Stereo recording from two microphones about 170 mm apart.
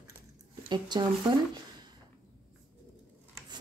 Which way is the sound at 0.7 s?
25° right (ahead or behind).